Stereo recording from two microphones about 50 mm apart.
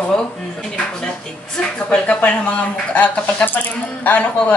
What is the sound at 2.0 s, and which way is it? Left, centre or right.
A man's voice, left.